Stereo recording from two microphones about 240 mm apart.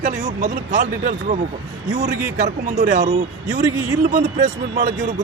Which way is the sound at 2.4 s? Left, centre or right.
Right.